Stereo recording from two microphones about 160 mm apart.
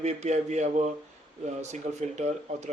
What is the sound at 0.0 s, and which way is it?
Speech, 45° right (ahead or behind).